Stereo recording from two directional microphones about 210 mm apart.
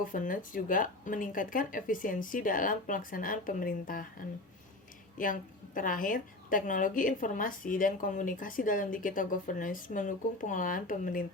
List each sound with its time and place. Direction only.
0.0 s a woman's voice: 40° left (ahead or behind)
5.1 s a woman's voice: 40° left (ahead or behind)